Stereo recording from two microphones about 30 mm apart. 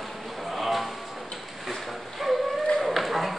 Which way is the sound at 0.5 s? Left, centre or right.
Centre.